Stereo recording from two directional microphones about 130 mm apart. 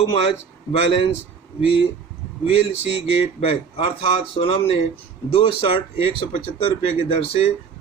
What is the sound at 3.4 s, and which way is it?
Speech, 50° left (ahead or behind).